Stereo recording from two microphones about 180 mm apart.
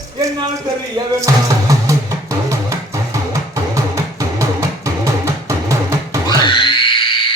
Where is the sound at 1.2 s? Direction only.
20° right (ahead or behind).